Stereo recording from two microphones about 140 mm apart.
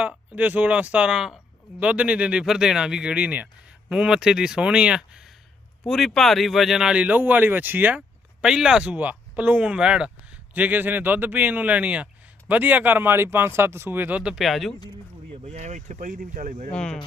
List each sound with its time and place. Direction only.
0.0 s speech: 10° right (ahead or behind)
15.5 s speech: 55° right (ahead or behind)
16.7 s speech: 5° left (ahead or behind)